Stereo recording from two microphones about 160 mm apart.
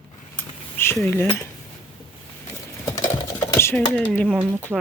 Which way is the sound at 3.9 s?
10° left (ahead or behind).